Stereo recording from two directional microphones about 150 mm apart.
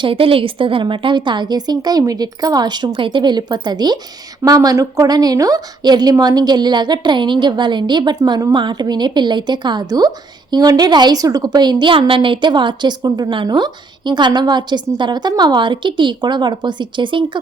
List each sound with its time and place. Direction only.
0.0 s a woman's voice: 35° right (ahead or behind)